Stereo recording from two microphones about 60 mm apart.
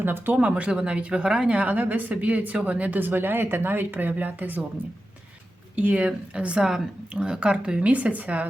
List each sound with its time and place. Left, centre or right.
0.0 s speech: right
0.3 s a woman's voice: centre
5.7 s a woman's voice: right